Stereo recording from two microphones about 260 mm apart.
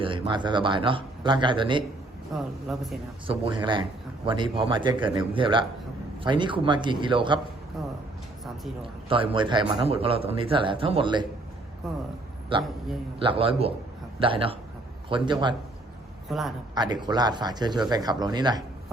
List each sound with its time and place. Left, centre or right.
0.0 s speech: centre
2.3 s speech: centre
3.2 s speech: centre
7.8 s a sound: centre
9.0 s speech: centre
11.8 s speech: centre
13.1 s speech: right
16.7 s speech: centre